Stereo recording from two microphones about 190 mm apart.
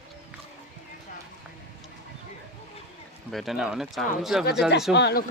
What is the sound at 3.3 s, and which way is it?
Speech, centre (ahead or behind).